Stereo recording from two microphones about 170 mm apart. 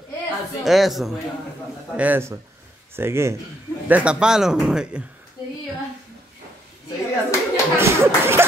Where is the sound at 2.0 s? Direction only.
10° right (ahead or behind).